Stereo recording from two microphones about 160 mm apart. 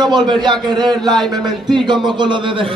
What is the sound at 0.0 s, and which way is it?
A man's voice, 25° right (ahead or behind).